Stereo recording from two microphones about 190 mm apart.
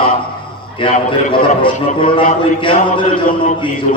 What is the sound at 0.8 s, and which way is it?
Mantra, 25° left (ahead or behind).